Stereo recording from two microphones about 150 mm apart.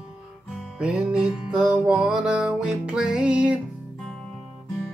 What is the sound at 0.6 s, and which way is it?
Music, 5° right (ahead or behind).